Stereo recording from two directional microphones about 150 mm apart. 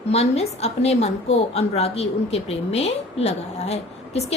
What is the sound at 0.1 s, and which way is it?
A woman's voice, 45° left (ahead or behind).